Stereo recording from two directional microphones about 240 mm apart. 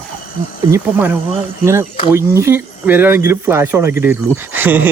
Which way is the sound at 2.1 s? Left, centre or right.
Centre.